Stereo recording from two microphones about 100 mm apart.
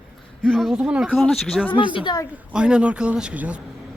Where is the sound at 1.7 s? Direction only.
60° left (ahead or behind).